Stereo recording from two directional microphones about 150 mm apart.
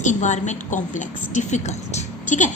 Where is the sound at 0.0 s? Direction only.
50° left (ahead or behind).